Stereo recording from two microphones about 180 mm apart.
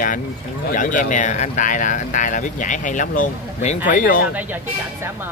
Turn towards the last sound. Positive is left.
turn(degrees=50)  # may be behind; listen again after turning